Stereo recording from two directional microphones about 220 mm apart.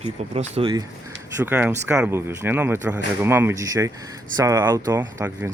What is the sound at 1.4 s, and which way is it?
Speech, 5° right (ahead or behind).